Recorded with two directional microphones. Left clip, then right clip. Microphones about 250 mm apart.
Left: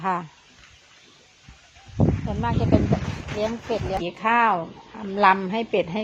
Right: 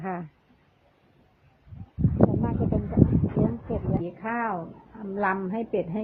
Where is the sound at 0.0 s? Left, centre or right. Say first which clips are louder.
Left 9 dB; centre.